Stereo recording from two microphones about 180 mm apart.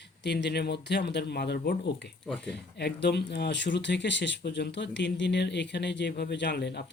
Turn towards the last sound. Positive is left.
turn(degrees=75)  # may be behind; listen again after turning